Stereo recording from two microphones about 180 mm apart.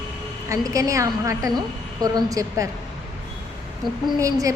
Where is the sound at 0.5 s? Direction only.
20° right (ahead or behind).